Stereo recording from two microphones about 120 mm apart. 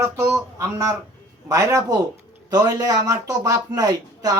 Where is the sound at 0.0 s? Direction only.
25° right (ahead or behind).